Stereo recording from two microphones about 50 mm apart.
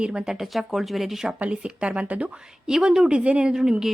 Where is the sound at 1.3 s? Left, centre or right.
Right.